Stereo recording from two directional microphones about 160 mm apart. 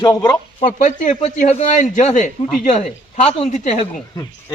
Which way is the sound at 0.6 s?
55° left (ahead or behind).